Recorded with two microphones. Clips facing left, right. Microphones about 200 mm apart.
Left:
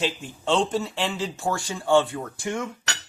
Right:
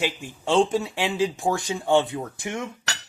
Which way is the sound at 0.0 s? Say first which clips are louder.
Even; 10° right (ahead or behind).